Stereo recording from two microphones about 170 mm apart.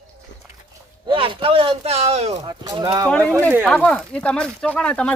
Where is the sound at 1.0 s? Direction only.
30° right (ahead or behind).